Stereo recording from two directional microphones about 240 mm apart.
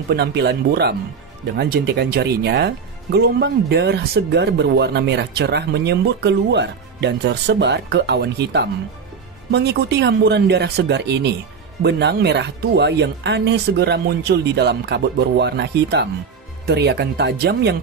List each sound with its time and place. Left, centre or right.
0.1 s speech: right